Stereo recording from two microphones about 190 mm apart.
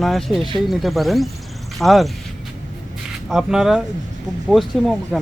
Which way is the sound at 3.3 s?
Centre (ahead or behind).